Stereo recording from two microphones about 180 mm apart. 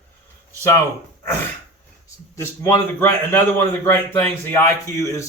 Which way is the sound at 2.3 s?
15° left (ahead or behind).